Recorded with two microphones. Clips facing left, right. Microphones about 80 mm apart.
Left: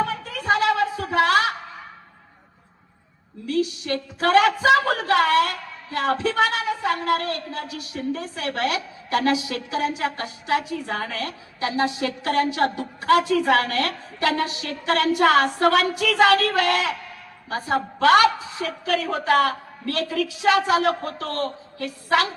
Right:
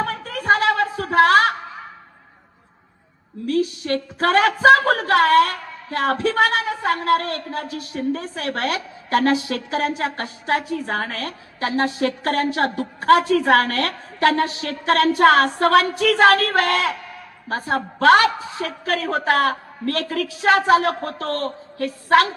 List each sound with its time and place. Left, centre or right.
0.0 s a sound: right
3.4 s a man's voice: right
7.9 s a woman's voice: right
8.4 s a man's voice: right
14.3 s a man's voice: right